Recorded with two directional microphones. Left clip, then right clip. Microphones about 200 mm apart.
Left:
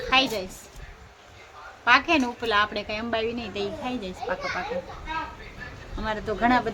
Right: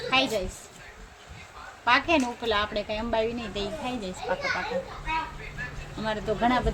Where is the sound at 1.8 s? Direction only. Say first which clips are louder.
Left 3 dB; 5° left (ahead or behind).